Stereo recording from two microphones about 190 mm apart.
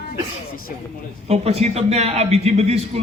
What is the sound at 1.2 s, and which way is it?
A man's voice, 35° right (ahead or behind).